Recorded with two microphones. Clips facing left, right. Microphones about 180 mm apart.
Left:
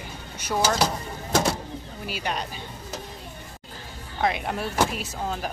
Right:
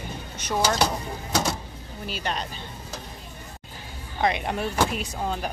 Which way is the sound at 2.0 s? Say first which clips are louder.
Even; 10° left (ahead or behind).